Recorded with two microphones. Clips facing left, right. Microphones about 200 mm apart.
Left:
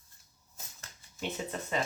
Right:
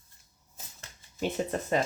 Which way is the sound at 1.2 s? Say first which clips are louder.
Right 6 dB; 45° right (ahead or behind).